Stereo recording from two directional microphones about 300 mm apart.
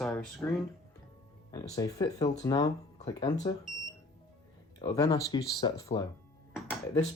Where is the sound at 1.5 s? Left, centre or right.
Centre.